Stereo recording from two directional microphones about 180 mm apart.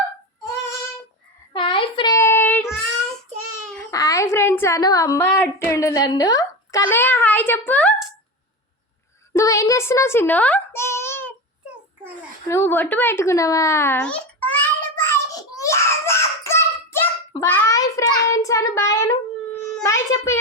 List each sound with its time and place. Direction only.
1.5 s child singing: 30° left (ahead or behind); by 2.6 s 10° left (ahead or behind)
3.9 s a woman's voice: 20° left (ahead or behind)
9.3 s a sound: 15° left (ahead or behind)
11.6 s child singing: 5° right (ahead or behind)
12.5 s babbling: 15° left (ahead or behind)
19.8 s a sound: 15° left (ahead or behind)